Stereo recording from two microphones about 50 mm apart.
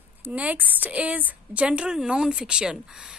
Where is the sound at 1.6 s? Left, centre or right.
Centre.